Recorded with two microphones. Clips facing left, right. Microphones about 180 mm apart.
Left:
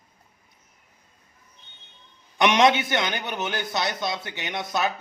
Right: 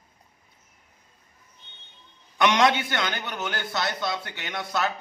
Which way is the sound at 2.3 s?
20° left (ahead or behind).